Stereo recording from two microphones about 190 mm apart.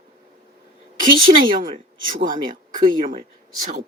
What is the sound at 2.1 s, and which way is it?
Speech, 45° right (ahead or behind).